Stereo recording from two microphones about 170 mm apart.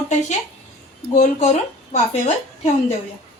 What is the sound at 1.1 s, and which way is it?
Speech, 40° left (ahead or behind).